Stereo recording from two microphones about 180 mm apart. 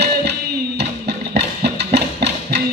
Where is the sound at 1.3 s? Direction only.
70° right (ahead or behind).